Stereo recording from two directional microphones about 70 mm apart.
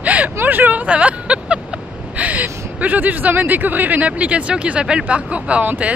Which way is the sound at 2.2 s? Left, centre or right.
Right.